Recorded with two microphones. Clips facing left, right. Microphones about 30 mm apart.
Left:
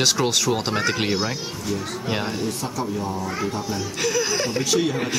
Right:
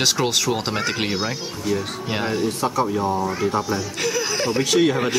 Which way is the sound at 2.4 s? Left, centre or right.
Right.